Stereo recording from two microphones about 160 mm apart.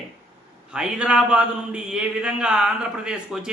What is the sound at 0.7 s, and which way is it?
A man's voice, 5° right (ahead or behind).